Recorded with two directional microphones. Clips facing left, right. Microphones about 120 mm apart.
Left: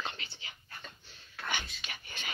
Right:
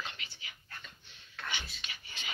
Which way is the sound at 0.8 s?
35° left (ahead or behind).